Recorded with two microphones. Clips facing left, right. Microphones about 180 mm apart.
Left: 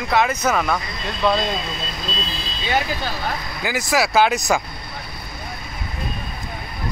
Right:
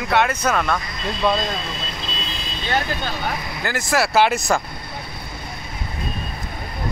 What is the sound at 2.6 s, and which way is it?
Speech, 10° left (ahead or behind).